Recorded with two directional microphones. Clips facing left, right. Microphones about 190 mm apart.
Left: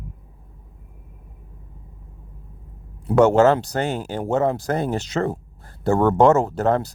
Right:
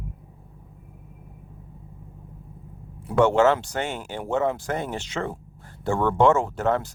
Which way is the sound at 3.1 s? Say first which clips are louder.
Left 4 dB; 40° left (ahead or behind).